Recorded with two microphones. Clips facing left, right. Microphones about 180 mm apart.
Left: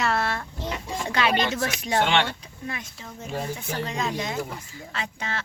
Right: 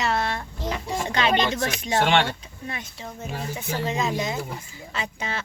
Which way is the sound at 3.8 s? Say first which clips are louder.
Right 4 dB; centre (ahead or behind).